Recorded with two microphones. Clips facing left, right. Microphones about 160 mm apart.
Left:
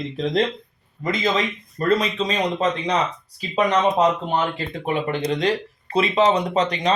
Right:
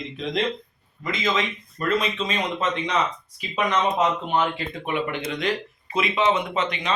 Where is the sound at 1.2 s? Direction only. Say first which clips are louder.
Left 1 dB; 35° left (ahead or behind).